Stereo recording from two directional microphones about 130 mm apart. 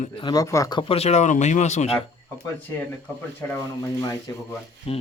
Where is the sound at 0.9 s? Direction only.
55° left (ahead or behind).